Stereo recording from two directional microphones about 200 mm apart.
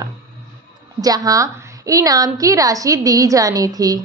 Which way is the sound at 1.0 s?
20° right (ahead or behind).